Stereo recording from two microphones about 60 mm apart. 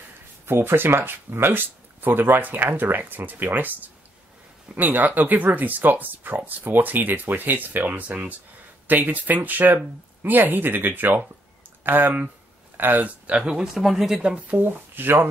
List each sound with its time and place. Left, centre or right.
0.5 s speech: right
4.7 s speech: right
13.4 s speech: centre
14.5 s speech: right